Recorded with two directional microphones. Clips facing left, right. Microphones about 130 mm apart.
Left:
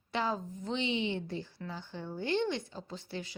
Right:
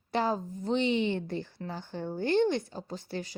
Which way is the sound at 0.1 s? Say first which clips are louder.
Right 4 dB; 40° right (ahead or behind).